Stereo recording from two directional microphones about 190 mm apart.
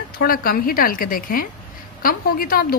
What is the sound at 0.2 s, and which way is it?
A woman's voice, 50° left (ahead or behind).